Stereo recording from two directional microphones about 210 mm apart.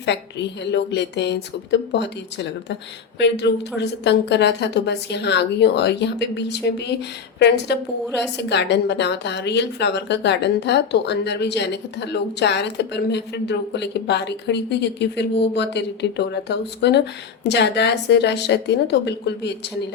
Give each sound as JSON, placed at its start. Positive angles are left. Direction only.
{"t": 0.0, "sound": "a woman's voice", "side_deg": 55}